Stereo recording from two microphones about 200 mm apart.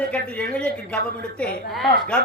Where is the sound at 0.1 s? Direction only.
5° left (ahead or behind).